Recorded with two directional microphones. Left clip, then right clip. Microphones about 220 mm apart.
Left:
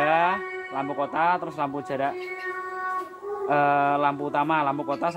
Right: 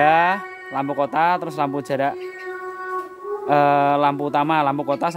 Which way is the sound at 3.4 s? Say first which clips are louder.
Right 5 dB; 50° right (ahead or behind).